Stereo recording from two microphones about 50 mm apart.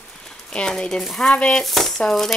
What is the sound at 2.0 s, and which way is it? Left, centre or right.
Speech, centre.